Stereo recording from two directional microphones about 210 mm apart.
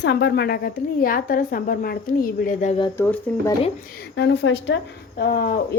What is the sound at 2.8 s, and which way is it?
Speech, 10° left (ahead or behind).